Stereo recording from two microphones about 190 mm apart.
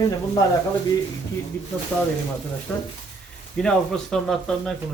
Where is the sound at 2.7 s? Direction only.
10° left (ahead or behind).